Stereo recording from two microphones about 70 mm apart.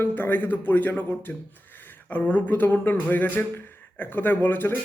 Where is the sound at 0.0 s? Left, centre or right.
Left.